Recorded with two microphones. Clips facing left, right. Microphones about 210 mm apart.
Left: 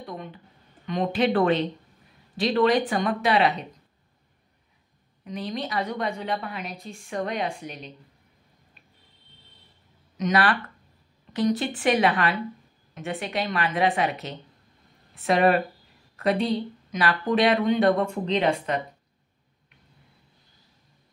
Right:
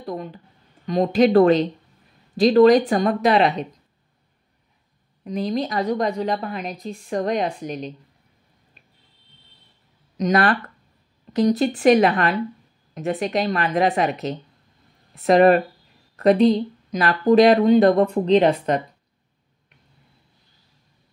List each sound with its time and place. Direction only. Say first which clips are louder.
0.0 s a sound: right 7 dB; 35° right (ahead or behind)
0.8 s a woman's voice: right 7 dB; 40° right (ahead or behind)
5.2 s a woman's voice: right 7 dB; 35° right (ahead or behind)
10.1 s a woman's voice: right 4 dB; 35° right (ahead or behind)